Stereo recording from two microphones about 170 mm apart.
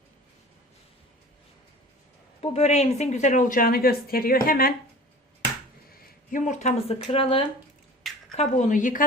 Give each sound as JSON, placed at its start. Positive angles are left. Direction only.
{"t": 2.4, "sound": "speech", "side_deg": 40}
{"t": 6.3, "sound": "speech", "side_deg": 45}
{"t": 8.0, "sound": "a sound", "side_deg": 0}
{"t": 8.4, "sound": "speech", "side_deg": 45}